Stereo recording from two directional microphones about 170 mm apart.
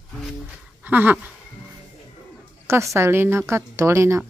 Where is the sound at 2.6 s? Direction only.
15° right (ahead or behind).